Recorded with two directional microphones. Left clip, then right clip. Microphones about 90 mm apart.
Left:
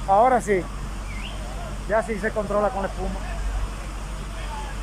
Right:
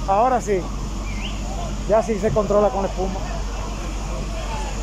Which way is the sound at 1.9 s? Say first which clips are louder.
Right 5 dB; 30° right (ahead or behind).